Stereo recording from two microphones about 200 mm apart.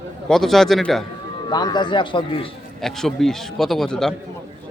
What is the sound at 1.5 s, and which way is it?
Speech, 20° left (ahead or behind).